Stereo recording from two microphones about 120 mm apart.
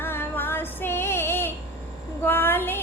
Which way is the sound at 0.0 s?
20° left (ahead or behind).